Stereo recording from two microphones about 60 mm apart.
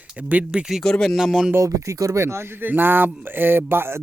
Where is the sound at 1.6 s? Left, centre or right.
Right.